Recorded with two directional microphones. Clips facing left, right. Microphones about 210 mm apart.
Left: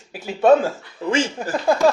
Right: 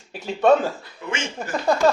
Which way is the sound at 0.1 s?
5° left (ahead or behind).